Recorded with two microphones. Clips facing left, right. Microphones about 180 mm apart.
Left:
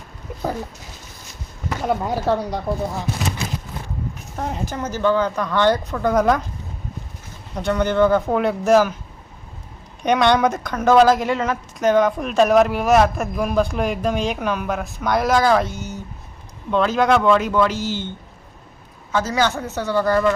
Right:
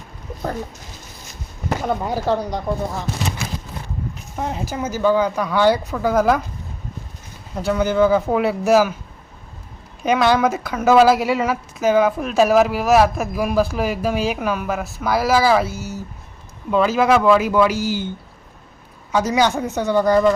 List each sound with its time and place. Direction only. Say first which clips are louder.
1.8 s speech: left 2 dB; centre (ahead or behind)
4.4 s speech: right 1 dB; centre (ahead or behind)
7.5 s speech: right 1 dB; 5° right (ahead or behind)
10.0 s speech: even; 5° right (ahead or behind)
19.1 s speech: right 3 dB; 15° right (ahead or behind)